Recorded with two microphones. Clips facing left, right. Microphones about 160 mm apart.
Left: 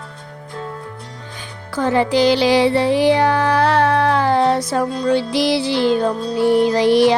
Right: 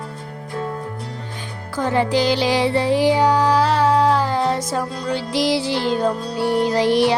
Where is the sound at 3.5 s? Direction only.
60° left (ahead or behind).